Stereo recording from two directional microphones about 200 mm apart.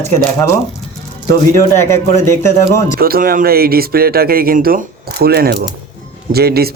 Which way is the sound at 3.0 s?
45° right (ahead or behind).